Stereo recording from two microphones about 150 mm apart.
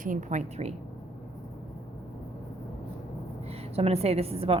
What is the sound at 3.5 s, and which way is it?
A woman's voice, 45° right (ahead or behind).